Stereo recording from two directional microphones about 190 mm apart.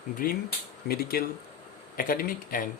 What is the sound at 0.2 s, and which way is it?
Speech, 50° left (ahead or behind).